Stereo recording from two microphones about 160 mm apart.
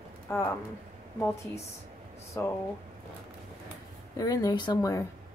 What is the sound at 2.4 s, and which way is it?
Speech, 15° left (ahead or behind).